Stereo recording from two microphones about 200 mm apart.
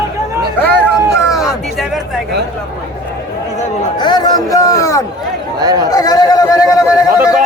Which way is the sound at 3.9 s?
20° left (ahead or behind).